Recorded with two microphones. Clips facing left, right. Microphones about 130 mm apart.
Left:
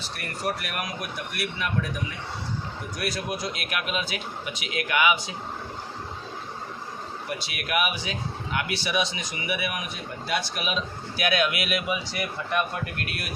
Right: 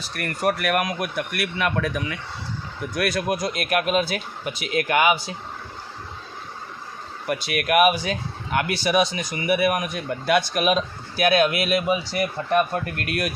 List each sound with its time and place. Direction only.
0.2 s a man's voice: 60° right (ahead or behind); by 2.1 s 80° right
2.9 s speech: 60° right (ahead or behind); by 5.3 s 40° right (ahead or behind)
7.3 s speech: 60° right (ahead or behind)